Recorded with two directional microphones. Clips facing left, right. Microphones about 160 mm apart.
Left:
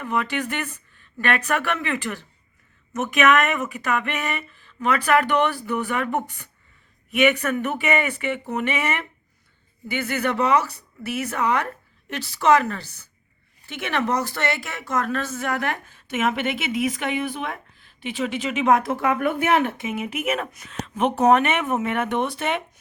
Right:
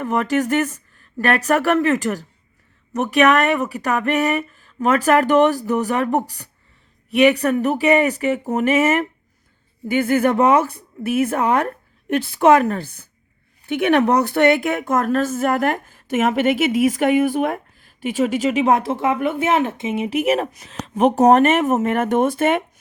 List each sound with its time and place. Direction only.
0.0 s speech: 45° right (ahead or behind)